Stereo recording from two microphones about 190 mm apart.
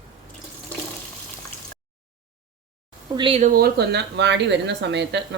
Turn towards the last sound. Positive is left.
turn(degrees=-65)  # may be behind; listen again after turning